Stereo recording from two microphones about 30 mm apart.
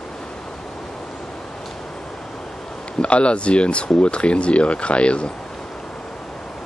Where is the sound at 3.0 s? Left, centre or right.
Left.